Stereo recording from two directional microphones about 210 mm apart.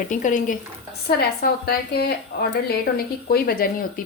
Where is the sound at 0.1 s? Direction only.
40° left (ahead or behind).